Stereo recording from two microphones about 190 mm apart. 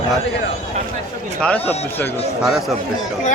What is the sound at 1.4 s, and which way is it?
Speech, 5° left (ahead or behind).